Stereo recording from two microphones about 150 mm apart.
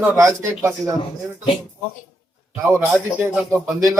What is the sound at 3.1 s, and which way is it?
Speech, 5° right (ahead or behind).